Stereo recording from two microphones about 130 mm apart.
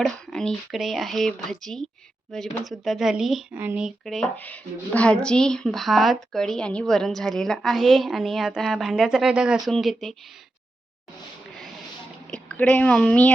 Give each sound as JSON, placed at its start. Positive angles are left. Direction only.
{"t": 0.0, "sound": "speech", "side_deg": 5}
{"t": 3.5, "sound": "speech", "side_deg": -15}
{"t": 3.8, "sound": "speech", "side_deg": 0}
{"t": 4.4, "sound": "speech", "side_deg": 10}
{"t": 12.3, "sound": "a woman's voice", "side_deg": 10}